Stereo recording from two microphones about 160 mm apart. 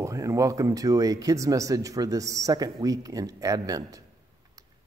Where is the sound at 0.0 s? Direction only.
20° right (ahead or behind).